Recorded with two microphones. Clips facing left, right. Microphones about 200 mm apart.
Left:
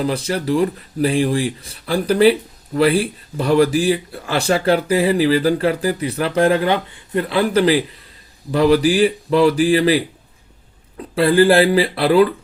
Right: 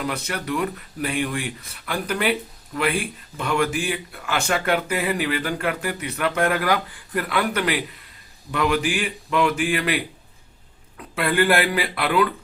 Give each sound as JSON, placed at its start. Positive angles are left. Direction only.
{"t": 0.0, "sound": "speech", "side_deg": 30}